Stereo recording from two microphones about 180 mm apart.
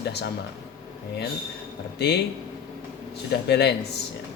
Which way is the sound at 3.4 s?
70° left (ahead or behind).